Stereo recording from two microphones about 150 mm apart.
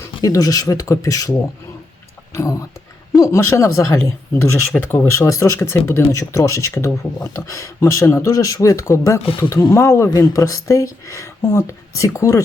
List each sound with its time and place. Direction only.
0.2 s speech: 25° left (ahead or behind)